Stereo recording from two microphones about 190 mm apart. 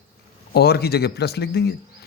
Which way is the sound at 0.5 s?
55° left (ahead or behind).